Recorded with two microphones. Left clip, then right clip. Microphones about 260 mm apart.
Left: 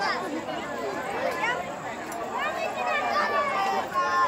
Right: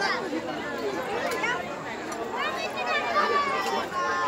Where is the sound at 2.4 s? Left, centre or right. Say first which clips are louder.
Left 2 dB; right.